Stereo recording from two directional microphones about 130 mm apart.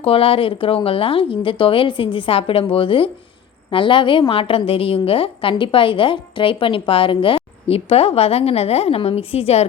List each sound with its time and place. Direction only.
0.0 s a woman's voice: 45° left (ahead or behind)